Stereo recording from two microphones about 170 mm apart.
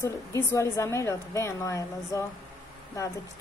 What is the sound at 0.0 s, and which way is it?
A woman's voice, 15° left (ahead or behind).